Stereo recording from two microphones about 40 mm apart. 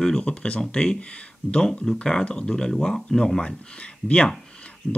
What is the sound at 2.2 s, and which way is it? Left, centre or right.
Speech, left.